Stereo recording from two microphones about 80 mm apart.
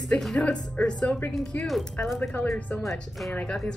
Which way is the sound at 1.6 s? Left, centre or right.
Centre.